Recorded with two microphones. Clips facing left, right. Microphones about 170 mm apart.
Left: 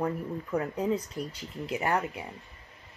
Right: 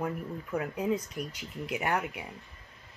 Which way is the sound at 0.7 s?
35° left (ahead or behind).